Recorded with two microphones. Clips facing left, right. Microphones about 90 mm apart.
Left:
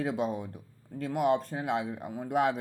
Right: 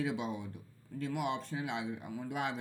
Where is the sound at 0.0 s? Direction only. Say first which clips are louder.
Left 5 dB; 45° left (ahead or behind).